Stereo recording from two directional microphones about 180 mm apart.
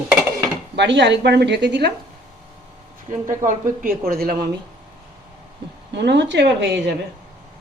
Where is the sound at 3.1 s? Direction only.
45° right (ahead or behind).